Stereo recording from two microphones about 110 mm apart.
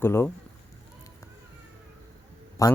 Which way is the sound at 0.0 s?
20° left (ahead or behind).